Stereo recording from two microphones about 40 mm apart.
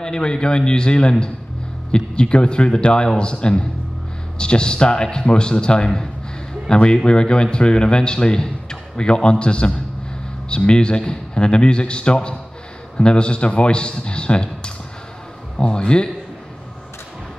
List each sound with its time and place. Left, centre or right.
0.0 s speech: left